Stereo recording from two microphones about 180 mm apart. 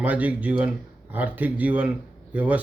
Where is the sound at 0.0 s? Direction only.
10° right (ahead or behind).